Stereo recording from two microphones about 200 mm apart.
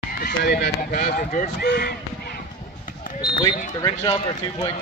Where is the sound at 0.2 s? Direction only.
50° left (ahead or behind).